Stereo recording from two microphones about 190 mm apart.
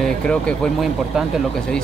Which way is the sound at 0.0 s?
5° left (ahead or behind).